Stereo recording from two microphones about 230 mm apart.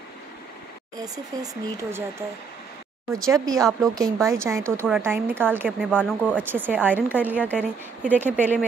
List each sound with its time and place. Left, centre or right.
0.9 s speech: centre
5.7 s speech: centre
6.5 s speech: centre